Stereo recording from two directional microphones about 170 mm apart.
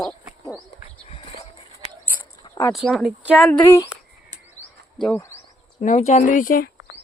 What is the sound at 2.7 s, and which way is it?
Speech, centre (ahead or behind).